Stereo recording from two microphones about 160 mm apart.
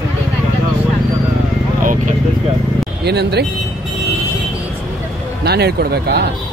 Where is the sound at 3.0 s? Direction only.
90° right.